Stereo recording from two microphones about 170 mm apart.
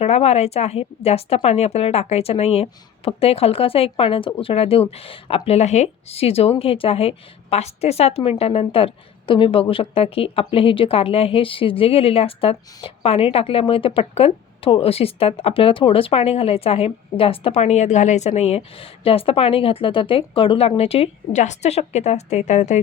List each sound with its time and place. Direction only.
0.0 s a woman's voice: 40° left (ahead or behind)